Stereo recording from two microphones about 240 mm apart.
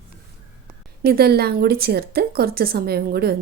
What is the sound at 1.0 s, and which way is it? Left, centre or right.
A woman's voice, right.